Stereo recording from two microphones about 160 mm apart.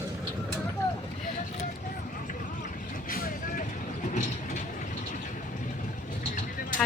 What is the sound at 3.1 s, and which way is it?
Vehicle, 60° left (ahead or behind).